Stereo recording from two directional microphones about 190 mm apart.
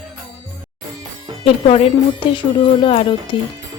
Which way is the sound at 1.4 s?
30° left (ahead or behind).